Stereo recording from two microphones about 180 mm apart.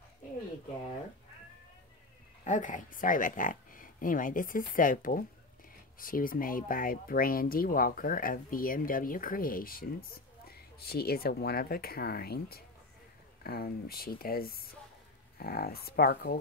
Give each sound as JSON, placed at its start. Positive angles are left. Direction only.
{"t": 2.4, "sound": "speech", "side_deg": 45}